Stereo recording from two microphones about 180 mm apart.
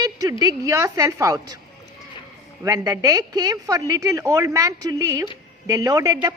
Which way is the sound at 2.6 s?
20° right (ahead or behind).